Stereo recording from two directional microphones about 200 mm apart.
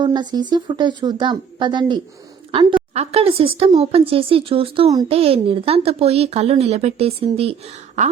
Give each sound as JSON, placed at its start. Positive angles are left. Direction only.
{"t": 0.0, "sound": "a woman's voice", "side_deg": -20}